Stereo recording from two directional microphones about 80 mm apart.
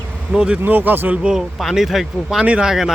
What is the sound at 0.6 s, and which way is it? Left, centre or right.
Speech, right.